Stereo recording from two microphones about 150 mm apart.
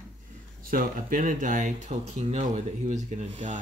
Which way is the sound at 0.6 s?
70° right (ahead or behind).